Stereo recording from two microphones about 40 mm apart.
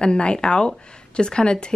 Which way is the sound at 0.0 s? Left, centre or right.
Left.